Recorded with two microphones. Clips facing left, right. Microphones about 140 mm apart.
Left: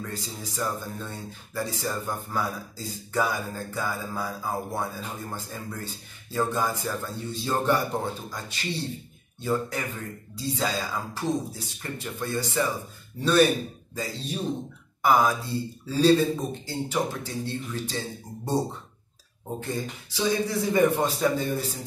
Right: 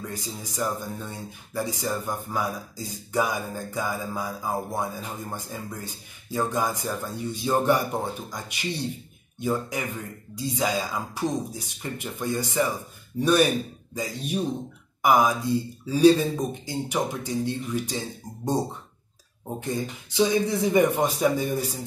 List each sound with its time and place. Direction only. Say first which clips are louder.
0.1 s speech: right 1 dB; 15° right (ahead or behind)
19.6 s speech: right 3 dB; 20° right (ahead or behind)